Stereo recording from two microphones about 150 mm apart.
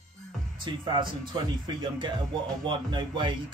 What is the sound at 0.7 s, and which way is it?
Speech, 30° right (ahead or behind).